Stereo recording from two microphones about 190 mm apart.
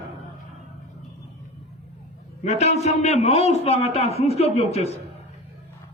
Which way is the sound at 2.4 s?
35° left (ahead or behind).